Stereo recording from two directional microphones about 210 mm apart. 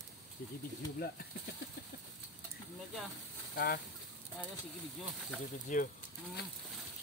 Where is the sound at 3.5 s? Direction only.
45° left (ahead or behind).